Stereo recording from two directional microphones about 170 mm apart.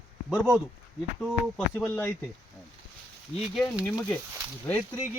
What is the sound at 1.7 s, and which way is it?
Speech, 10° left (ahead or behind).